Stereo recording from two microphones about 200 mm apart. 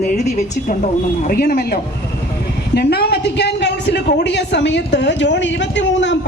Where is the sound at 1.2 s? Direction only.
45° left (ahead or behind).